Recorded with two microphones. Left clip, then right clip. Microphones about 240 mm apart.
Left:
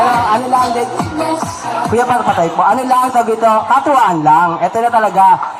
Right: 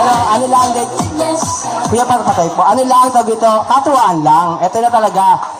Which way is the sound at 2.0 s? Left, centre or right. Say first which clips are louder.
Right 1 dB; right.